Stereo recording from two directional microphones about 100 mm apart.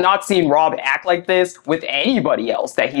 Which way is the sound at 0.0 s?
25° left (ahead or behind).